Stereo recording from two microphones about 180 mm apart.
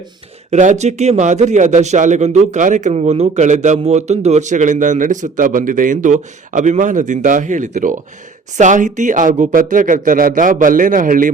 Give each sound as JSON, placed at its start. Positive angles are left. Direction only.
{"t": 0.5, "sound": "a man's voice", "side_deg": -40}